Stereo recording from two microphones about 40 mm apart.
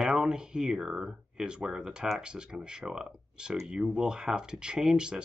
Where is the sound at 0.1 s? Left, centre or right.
Right.